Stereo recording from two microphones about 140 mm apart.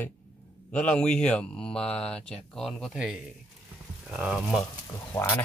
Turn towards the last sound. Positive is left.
turn(degrees=15)  # may be behind; listen again after turning